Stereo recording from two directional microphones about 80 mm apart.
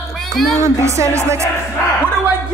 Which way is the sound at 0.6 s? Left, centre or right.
Right.